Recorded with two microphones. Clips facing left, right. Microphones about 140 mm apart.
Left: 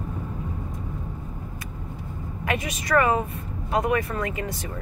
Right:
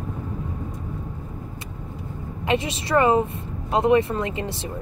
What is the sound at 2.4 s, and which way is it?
Speech, 25° right (ahead or behind).